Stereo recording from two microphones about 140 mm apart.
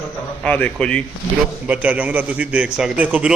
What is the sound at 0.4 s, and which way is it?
Speech, 10° left (ahead or behind).